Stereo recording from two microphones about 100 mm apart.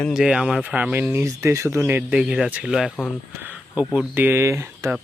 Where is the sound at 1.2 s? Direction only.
30° right (ahead or behind).